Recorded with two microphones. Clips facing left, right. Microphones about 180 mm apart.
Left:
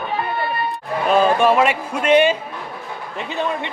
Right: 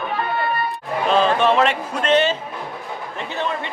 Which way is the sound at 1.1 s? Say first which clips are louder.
Left 2 dB; 10° left (ahead or behind).